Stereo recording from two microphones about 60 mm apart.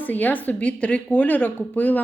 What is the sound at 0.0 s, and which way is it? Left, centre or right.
A woman's voice, left.